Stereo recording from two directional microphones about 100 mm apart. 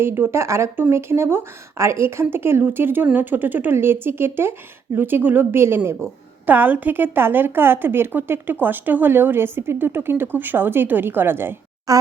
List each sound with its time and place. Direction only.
0.0 s a woman's voice: 25° right (ahead or behind)
11.9 s fart: 35° right (ahead or behind)